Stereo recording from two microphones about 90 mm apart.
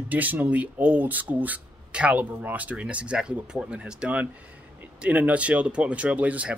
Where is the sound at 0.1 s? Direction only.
20° right (ahead or behind).